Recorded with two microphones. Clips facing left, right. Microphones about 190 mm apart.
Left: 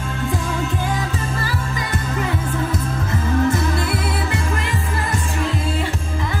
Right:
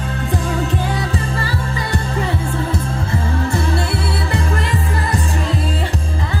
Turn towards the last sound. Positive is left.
turn(degrees=-35)  # may be behind; listen again after turning